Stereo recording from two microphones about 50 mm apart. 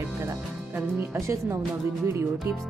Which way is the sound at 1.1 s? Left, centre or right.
Right.